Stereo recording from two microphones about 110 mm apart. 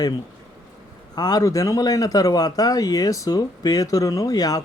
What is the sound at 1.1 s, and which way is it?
Speech, 35° left (ahead or behind).